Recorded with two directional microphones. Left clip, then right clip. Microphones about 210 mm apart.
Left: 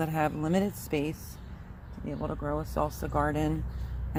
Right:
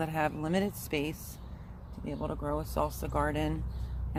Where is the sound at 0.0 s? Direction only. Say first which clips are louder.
Left 2 dB; 35° left (ahead or behind).